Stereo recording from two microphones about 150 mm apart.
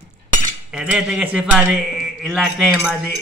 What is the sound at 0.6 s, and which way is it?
A man's voice, 5° right (ahead or behind).